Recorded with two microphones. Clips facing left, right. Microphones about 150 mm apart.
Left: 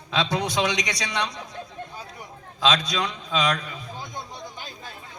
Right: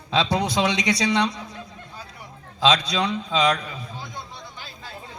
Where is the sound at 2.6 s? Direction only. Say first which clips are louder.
Right 3 dB; 30° right (ahead or behind).